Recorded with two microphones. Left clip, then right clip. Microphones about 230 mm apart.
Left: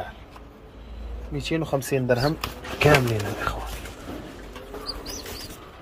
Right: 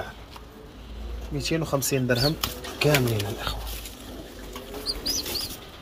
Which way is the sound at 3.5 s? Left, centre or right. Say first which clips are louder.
Left 3 dB; centre.